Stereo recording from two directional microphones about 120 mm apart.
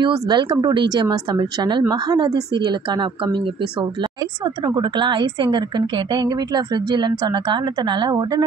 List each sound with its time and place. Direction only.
0.0 s a woman's voice: 40° right (ahead or behind)
4.6 s a woman's voice: 40° right (ahead or behind)